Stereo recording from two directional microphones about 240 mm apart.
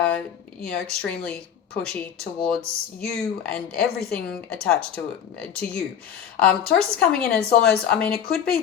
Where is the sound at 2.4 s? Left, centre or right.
Centre.